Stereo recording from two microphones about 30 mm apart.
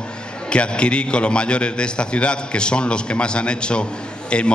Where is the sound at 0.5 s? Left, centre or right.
Left.